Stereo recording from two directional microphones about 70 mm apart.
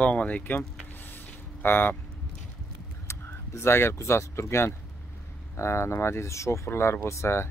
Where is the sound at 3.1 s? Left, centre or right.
Left.